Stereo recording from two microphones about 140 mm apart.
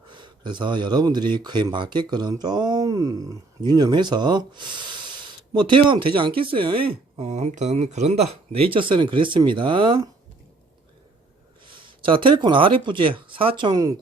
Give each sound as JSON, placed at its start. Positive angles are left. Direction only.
{"t": 0.1, "sound": "speech", "side_deg": -35}
{"t": 11.7, "sound": "speech", "side_deg": -35}